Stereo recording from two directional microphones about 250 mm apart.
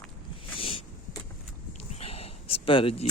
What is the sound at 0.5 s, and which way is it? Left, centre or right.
Vehicle, left.